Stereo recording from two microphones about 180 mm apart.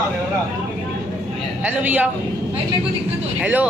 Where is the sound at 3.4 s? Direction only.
10° right (ahead or behind).